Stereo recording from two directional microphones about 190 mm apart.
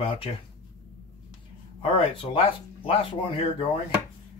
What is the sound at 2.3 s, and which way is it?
Speech, 30° left (ahead or behind).